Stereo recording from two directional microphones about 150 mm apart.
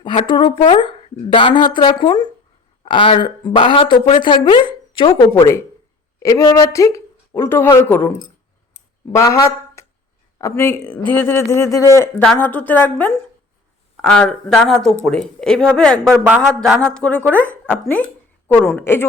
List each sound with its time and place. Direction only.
0.0 s speech: 35° left (ahead or behind)
5.3 s speech: 20° left (ahead or behind)
9.1 s speech: 20° left (ahead or behind)